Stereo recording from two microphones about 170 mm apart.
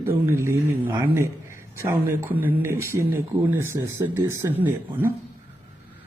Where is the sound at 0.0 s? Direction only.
10° right (ahead or behind).